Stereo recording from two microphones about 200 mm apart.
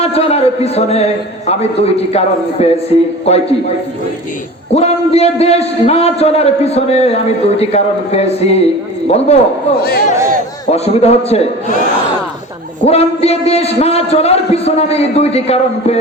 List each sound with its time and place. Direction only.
0.0 s a man's voice: 30° left (ahead or behind)
4.7 s a man's voice: 30° left (ahead or behind)
9.7 s a man's voice: 50° left (ahead or behind)
10.7 s a man's voice: 30° left (ahead or behind)
12.8 s a man's voice: 30° left (ahead or behind)